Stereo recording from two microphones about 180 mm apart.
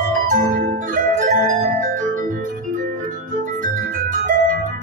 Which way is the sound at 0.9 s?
45° right (ahead or behind).